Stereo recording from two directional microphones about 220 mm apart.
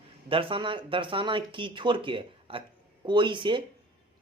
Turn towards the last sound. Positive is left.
turn(degrees=-20)  # may be behind; listen again after turning